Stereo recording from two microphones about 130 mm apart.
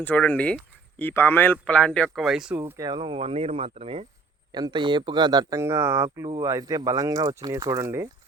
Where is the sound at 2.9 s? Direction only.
40° right (ahead or behind).